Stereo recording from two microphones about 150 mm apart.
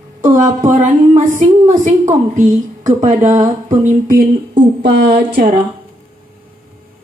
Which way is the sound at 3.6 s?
60° right (ahead or behind).